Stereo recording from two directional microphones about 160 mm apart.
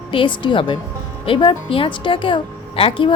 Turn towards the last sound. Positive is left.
turn(degrees=35)  # may be behind; listen again after turning